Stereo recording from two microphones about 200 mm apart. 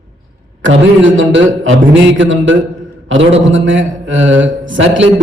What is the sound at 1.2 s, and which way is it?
A man's voice, 75° right (ahead or behind).